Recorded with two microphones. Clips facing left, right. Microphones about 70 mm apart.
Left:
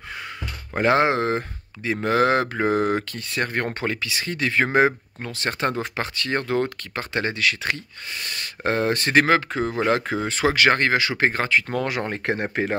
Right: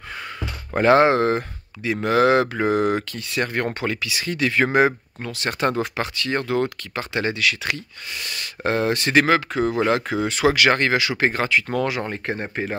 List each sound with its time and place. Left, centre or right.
0.7 s speech: centre
2.0 s speech: left
6.1 s speech: left
11.9 s speech: left
12.6 s speech: left